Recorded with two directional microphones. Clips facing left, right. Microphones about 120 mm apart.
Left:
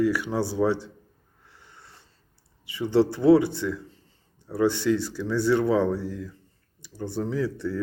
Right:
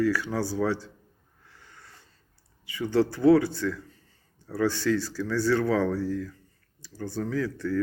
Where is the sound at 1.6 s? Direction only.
25° left (ahead or behind).